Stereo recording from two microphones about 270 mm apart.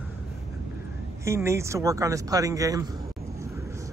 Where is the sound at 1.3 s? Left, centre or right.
Centre.